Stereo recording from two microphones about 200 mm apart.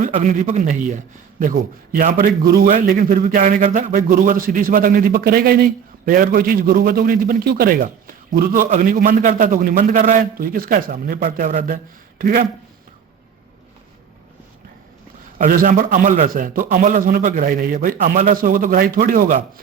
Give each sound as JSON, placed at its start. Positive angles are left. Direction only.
{"t": 0.0, "sound": "a man's voice", "side_deg": -40}
{"t": 15.4, "sound": "a man's voice", "side_deg": -40}